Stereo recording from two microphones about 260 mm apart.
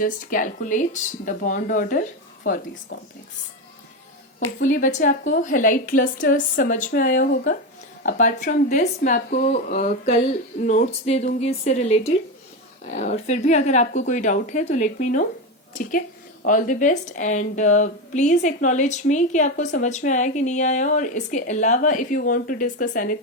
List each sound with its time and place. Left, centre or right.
0.0 s a woman's voice: left
4.6 s a woman's voice: left